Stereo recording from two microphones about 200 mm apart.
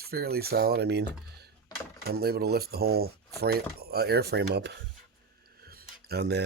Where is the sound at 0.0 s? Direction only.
50° right (ahead or behind).